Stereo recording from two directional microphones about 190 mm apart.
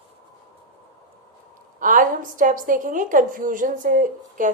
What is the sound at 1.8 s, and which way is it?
A woman's voice, 45° right (ahead or behind).